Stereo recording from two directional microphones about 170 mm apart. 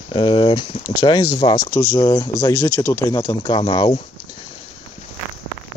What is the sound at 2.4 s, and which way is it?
Speech, 15° left (ahead or behind).